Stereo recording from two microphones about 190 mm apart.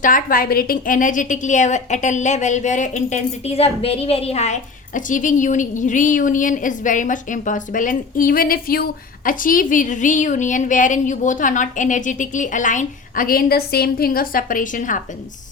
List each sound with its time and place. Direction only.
0.0 s a woman's voice: 50° left (ahead or behind)